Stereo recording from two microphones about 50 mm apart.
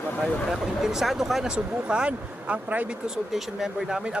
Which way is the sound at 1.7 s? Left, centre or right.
Right.